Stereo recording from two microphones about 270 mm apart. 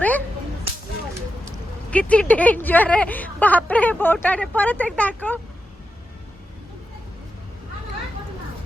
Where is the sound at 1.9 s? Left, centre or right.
Centre.